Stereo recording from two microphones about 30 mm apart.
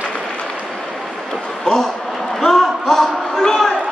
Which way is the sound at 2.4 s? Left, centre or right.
Centre.